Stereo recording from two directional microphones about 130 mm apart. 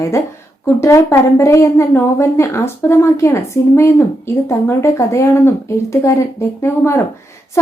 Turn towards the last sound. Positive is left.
turn(degrees=20)  # may be behind; listen again after turning